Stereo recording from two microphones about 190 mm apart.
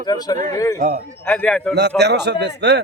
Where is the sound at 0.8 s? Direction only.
40° right (ahead or behind).